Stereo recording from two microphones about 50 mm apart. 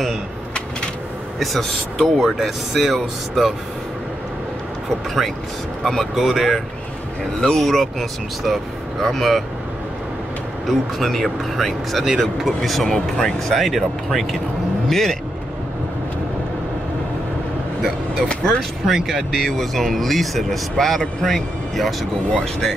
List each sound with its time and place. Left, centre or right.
1.6 s speech: centre
2.2 s speech: centre
5.9 s speech: centre
10.7 s speech: centre
12.8 s speech: centre
13.5 s speech: centre
18.9 s speech: centre